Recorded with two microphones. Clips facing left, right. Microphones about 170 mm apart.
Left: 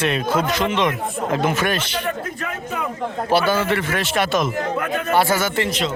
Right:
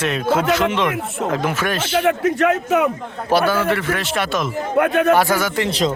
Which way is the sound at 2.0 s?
85° right.